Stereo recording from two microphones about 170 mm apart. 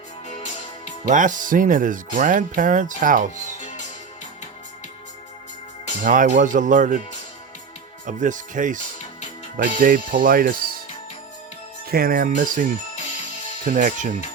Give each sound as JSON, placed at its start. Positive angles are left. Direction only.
{"t": 0.3, "sound": "music", "side_deg": 40}
{"t": 1.0, "sound": "speech", "side_deg": -50}
{"t": 6.0, "sound": "speech", "side_deg": -50}
{"t": 8.0, "sound": "speech", "side_deg": -50}
{"t": 11.9, "sound": "speech", "side_deg": -60}
{"t": 13.7, "sound": "speech", "side_deg": -45}